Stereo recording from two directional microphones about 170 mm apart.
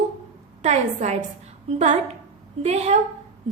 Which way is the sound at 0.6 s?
40° right (ahead or behind).